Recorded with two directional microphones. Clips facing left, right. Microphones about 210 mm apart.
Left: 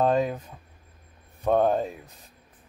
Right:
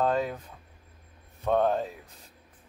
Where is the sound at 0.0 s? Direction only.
20° left (ahead or behind).